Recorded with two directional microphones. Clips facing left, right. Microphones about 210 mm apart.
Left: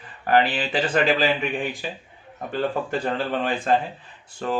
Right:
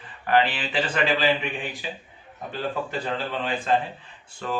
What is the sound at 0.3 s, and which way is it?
Speech, 40° left (ahead or behind).